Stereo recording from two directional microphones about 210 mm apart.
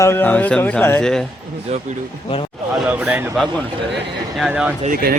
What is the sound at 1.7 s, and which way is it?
Speech, 30° right (ahead or behind).